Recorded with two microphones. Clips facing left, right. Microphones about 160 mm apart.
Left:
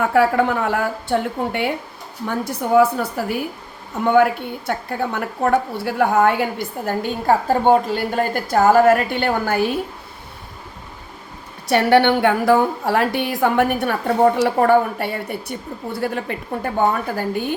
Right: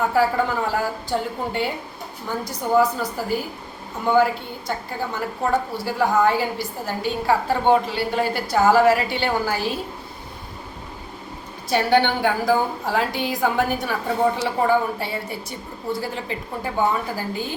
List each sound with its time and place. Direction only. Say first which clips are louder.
0.0 s a woman's voice: left 4 dB; 65° left (ahead or behind)
11.7 s a woman's voice: left 4 dB; 65° left (ahead or behind)